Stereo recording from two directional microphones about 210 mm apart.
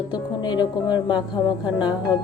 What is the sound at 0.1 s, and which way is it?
Speech, 20° left (ahead or behind).